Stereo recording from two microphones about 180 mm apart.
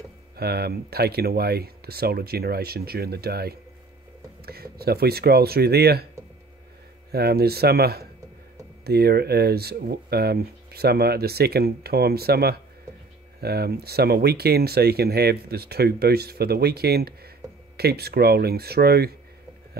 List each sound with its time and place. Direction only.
0.4 s speech: 60° right (ahead or behind)
7.1 s speech: 60° right (ahead or behind)